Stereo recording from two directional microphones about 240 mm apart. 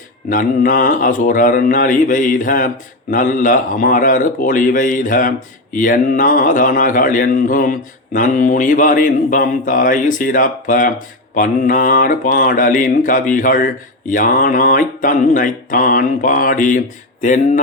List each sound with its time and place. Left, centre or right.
0.3 s a man's voice: left